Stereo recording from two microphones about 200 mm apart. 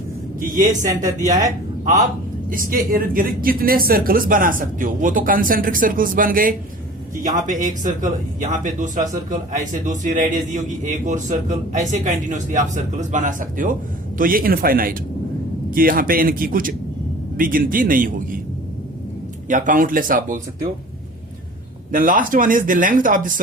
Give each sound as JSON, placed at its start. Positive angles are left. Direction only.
{"t": 0.3, "sound": "a man's voice", "side_deg": -40}
{"t": 19.5, "sound": "a man's voice", "side_deg": -40}
{"t": 21.9, "sound": "speech", "side_deg": -40}